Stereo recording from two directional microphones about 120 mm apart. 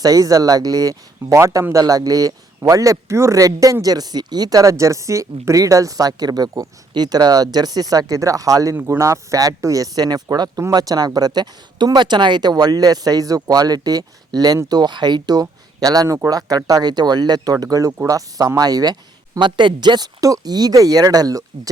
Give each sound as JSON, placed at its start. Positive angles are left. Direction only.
{"t": 0.0, "sound": "speech", "side_deg": -30}